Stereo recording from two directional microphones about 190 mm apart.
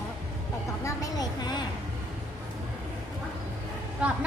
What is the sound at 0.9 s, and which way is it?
Vehicle, 20° left (ahead or behind).